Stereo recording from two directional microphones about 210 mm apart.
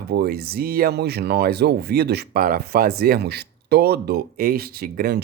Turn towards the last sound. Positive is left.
turn(degrees=-45)  # may be behind; listen again after turning